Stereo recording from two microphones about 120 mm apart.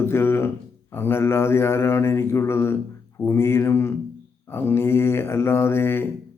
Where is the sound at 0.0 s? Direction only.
20° left (ahead or behind).